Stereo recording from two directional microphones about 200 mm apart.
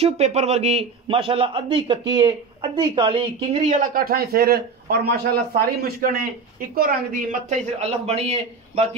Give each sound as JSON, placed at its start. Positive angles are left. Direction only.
{"t": 0.0, "sound": "a man's voice", "side_deg": -30}